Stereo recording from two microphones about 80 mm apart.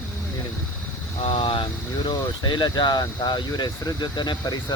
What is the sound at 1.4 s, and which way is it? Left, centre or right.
Vehicle, left.